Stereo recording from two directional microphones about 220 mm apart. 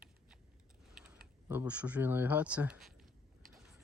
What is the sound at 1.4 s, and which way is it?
Speech, 5° right (ahead or behind).